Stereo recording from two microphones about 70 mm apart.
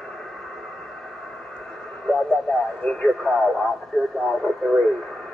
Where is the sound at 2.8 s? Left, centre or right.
Centre.